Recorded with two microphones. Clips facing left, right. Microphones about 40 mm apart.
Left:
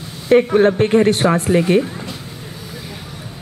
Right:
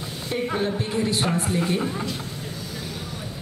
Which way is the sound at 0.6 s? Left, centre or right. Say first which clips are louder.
Left 12 dB; left.